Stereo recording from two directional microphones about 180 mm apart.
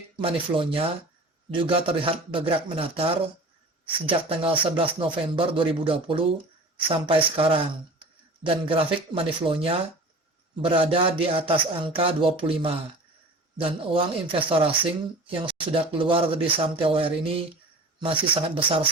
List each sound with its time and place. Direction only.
0.2 s a man's voice: 30° right (ahead or behind)